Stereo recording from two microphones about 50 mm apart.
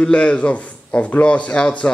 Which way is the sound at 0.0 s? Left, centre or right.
Left.